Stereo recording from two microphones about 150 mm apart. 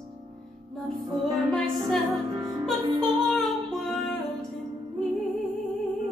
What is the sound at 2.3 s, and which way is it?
Music, 20° right (ahead or behind).